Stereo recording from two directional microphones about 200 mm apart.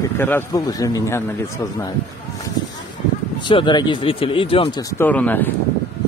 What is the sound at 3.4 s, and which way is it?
Speech, 25° left (ahead or behind).